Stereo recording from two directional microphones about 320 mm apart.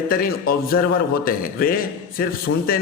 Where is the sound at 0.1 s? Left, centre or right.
Left.